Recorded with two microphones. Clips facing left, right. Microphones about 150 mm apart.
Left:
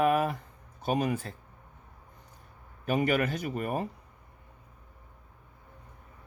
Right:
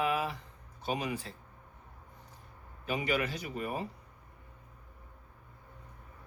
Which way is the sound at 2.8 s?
50° left (ahead or behind).